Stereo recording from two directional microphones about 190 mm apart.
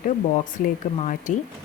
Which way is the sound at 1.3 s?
40° left (ahead or behind).